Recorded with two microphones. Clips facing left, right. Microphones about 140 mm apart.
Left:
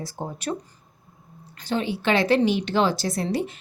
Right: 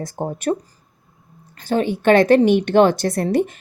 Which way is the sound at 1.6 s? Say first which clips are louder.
Right 8 dB; 45° right (ahead or behind).